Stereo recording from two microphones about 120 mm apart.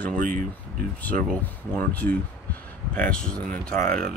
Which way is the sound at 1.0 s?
15° left (ahead or behind).